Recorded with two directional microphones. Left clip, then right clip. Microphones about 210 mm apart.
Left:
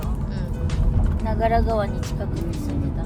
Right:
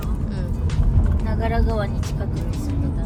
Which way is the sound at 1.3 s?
45° left (ahead or behind).